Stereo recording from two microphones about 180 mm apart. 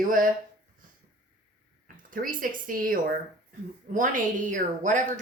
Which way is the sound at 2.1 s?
50° right (ahead or behind).